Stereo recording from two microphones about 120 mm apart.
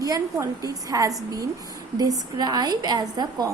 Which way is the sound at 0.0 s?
30° right (ahead or behind).